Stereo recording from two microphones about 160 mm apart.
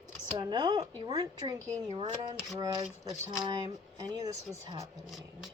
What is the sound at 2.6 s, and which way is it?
Speech, 20° right (ahead or behind).